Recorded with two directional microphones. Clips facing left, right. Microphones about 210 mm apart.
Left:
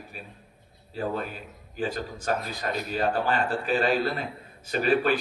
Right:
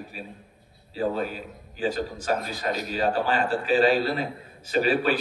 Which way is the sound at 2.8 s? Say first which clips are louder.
Even; 55° left (ahead or behind).